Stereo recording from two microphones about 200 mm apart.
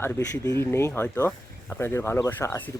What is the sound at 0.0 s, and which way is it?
Speech, 10° left (ahead or behind).